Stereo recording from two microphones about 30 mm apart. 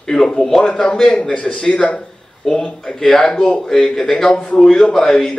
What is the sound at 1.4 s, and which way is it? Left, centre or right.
Speech, left.